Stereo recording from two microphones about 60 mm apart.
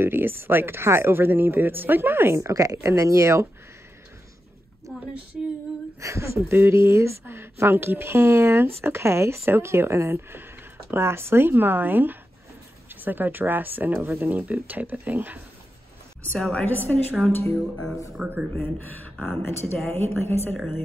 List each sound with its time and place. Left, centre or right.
0.0 s speech: right
2.3 s speech: right
2.9 s speech: right
5.9 s speech: right
16.3 s a woman's voice: centre
18.2 s speech: right
18.6 s speech: left